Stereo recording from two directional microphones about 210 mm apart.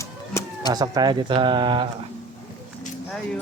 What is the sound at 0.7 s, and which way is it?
Speech, 20° right (ahead or behind).